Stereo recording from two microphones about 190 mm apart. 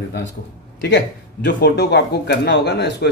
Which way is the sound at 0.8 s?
65° left (ahead or behind).